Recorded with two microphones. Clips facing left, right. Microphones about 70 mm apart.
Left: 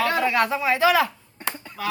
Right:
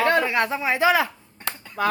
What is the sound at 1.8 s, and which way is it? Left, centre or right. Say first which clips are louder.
Speech: right 5 dB; right.